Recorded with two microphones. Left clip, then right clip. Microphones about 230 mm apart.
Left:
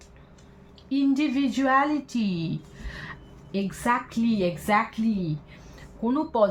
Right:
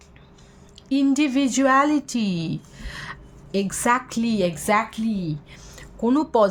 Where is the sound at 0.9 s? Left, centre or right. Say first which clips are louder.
Right 4 dB; right.